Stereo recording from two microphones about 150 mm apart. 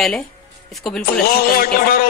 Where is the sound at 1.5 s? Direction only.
80° left.